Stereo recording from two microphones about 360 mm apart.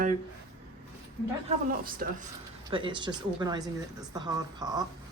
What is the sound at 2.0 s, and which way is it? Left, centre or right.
A woman's voice, right.